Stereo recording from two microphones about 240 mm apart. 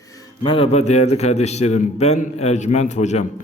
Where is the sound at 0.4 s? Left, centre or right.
Left.